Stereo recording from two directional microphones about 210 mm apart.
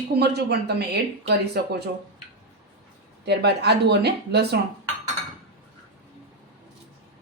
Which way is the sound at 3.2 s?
50° right (ahead or behind).